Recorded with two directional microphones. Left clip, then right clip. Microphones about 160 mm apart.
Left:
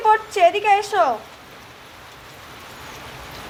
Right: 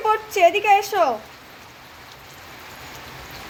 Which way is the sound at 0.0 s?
40° right (ahead or behind).